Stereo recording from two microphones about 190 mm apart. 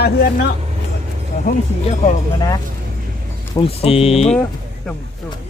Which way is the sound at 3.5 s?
30° left (ahead or behind).